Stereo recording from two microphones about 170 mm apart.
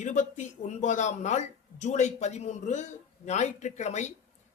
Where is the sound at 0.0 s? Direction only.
45° left (ahead or behind).